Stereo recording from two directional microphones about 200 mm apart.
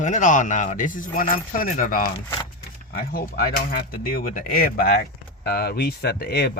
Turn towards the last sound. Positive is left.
turn(degrees=50)  # may be behind; listen again after turning